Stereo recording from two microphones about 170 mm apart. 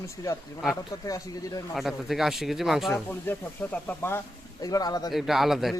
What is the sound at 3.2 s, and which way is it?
Speech, 10° left (ahead or behind).